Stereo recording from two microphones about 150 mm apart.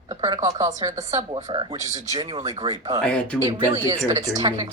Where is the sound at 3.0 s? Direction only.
5° left (ahead or behind).